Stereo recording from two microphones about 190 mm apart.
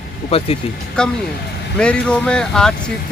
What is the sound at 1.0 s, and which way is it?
Speech, 5° left (ahead or behind).